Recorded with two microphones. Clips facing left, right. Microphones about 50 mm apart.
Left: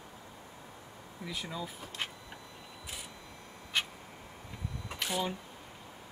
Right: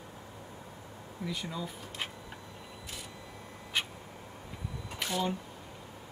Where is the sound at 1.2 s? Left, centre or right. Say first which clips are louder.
Right 2 dB; centre.